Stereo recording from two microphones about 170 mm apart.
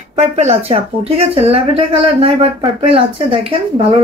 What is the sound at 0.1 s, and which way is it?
Speech, 40° right (ahead or behind).